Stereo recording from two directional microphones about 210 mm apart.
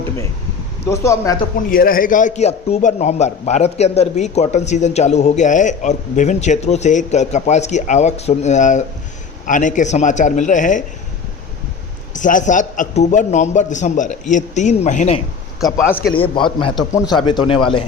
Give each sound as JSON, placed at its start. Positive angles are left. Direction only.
{"t": 0.9, "sound": "speech", "side_deg": 15}
{"t": 1.7, "sound": "a man's voice", "side_deg": 45}
{"t": 12.1, "sound": "a man's voice", "side_deg": 35}
{"t": 15.6, "sound": "speech", "side_deg": 10}
{"t": 16.1, "sound": "a man's voice", "side_deg": 25}